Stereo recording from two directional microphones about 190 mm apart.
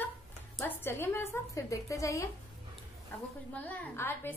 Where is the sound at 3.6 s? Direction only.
10° left (ahead or behind).